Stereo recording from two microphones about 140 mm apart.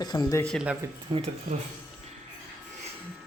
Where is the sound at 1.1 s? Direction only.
40° right (ahead or behind).